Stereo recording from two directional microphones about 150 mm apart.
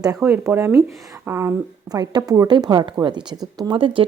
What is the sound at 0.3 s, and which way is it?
Speech, 15° right (ahead or behind).